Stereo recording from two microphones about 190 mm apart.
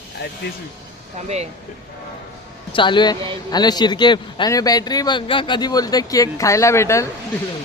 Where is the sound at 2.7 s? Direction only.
25° left (ahead or behind).